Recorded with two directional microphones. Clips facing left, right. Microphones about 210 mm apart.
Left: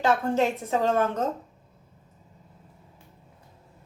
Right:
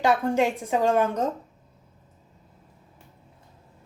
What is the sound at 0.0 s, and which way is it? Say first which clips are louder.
A woman's voice: right 1 dB; 15° right (ahead or behind).